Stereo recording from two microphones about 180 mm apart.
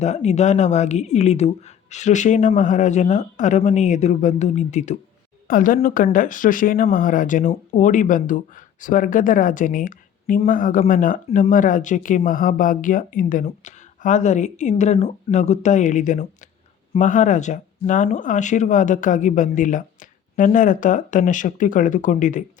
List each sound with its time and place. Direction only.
0.0 s speech: 40° left (ahead or behind)